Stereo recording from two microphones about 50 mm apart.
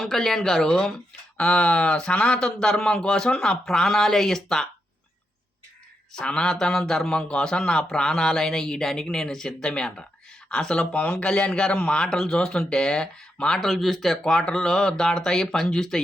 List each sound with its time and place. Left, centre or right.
0.0 s speech: centre
6.1 s speech: centre
13.7 s speech: centre
14.3 s speech: centre